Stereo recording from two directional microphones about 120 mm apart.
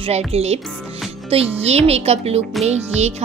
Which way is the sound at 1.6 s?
60° right (ahead or behind).